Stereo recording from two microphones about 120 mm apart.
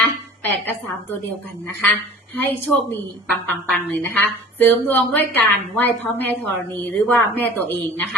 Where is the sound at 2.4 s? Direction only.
15° left (ahead or behind).